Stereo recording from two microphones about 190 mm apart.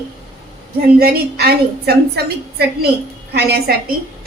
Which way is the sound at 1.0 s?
55° right (ahead or behind).